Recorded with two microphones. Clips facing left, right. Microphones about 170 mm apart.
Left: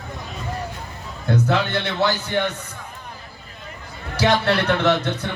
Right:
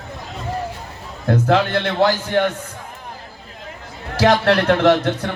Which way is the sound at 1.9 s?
50° right (ahead or behind).